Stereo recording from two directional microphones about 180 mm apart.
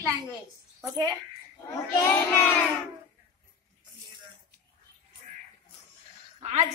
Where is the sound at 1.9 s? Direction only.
15° left (ahead or behind).